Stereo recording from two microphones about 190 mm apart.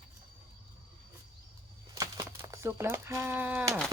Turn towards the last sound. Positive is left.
turn(degrees=-10)  # may be behind; listen again after turning